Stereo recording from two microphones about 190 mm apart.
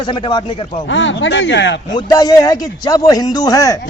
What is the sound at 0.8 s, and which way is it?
Speech, 75° left (ahead or behind).